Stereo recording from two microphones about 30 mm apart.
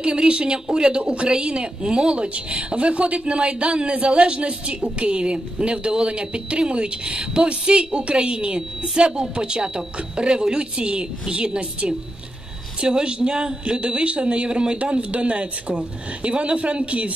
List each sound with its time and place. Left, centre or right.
0.0 s speech: right